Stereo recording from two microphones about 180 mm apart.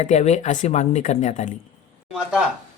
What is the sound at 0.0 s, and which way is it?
Speech, 35° left (ahead or behind).